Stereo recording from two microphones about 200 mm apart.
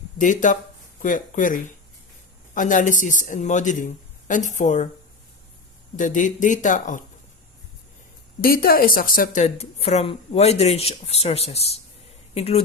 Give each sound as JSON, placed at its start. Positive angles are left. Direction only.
{"t": 0.2, "sound": "speech", "side_deg": 40}
{"t": 6.0, "sound": "speech", "side_deg": 40}
{"t": 8.4, "sound": "speech", "side_deg": 45}